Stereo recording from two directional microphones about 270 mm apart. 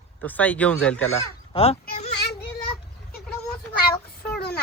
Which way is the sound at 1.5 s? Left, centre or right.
Left.